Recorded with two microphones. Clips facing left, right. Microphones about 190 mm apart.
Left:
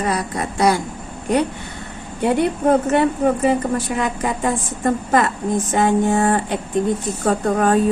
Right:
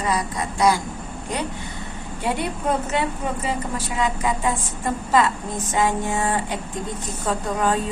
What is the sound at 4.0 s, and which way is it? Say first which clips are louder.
A woman's voice: left 2 dB; 55° left (ahead or behind).